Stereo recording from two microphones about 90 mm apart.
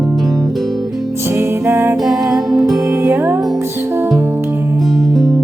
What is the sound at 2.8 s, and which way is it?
Music, 30° right (ahead or behind).